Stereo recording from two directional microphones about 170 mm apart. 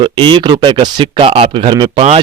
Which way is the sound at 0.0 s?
30° right (ahead or behind).